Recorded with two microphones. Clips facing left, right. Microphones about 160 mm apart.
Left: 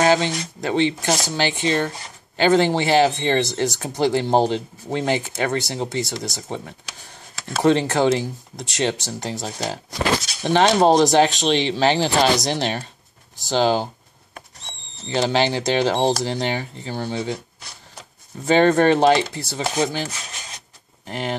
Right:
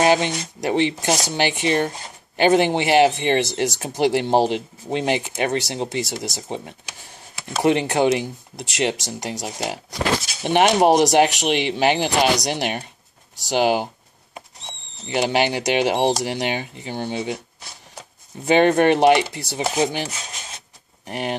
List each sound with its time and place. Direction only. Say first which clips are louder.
0.0 s speech: even; 20° right (ahead or behind)
15.0 s speech: even; 15° right (ahead or behind)
18.4 s speech: even; 15° right (ahead or behind)